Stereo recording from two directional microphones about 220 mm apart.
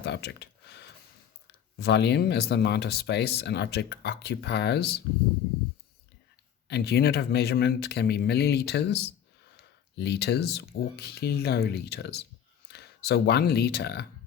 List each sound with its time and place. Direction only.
0.0 s speech: 50° left (ahead or behind)
6.7 s speech: 45° left (ahead or behind)